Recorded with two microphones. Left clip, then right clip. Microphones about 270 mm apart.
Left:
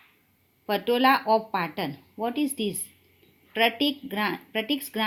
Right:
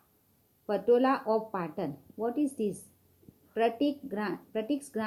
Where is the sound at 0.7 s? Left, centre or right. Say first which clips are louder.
Left 4 dB; left.